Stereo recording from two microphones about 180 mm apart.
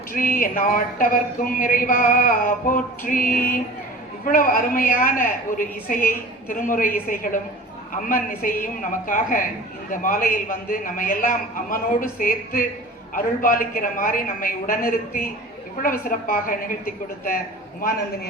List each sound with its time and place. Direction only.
0.1 s speech: 50° left (ahead or behind)